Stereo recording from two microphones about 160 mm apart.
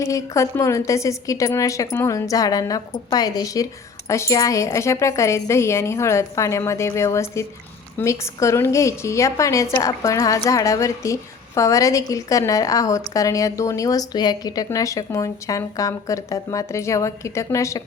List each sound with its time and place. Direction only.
0.0 s a woman's voice: 20° left (ahead or behind)